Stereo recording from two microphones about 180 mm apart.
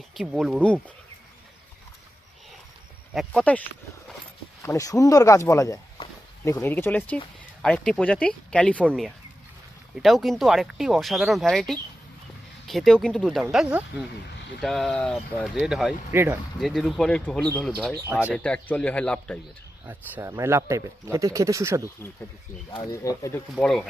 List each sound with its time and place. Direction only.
0.2 s speech: centre (ahead or behind)
3.2 s speech: 5° left (ahead or behind)
16.1 s speech: 15° right (ahead or behind)
16.6 s speech: centre (ahead or behind)
19.8 s speech: 10° right (ahead or behind)
22.7 s speech: 20° left (ahead or behind)
23.6 s speech: 5° left (ahead or behind)